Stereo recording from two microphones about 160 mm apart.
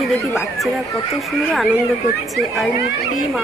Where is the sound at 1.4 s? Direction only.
Centre (ahead or behind).